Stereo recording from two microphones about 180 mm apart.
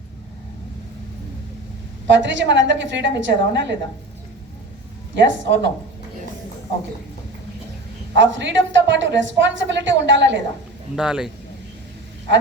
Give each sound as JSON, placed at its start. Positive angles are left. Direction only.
{"t": 2.0, "sound": "a woman's voice", "side_deg": -90}
{"t": 5.1, "sound": "a woman's voice", "side_deg": -90}
{"t": 8.1, "sound": "a woman's voice", "side_deg": -85}
{"t": 10.9, "sound": "speech", "side_deg": -5}